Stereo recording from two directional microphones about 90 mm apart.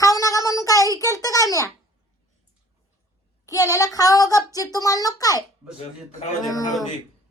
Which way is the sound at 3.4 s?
35° left (ahead or behind).